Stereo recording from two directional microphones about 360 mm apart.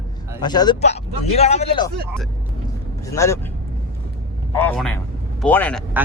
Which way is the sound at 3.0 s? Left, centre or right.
Centre.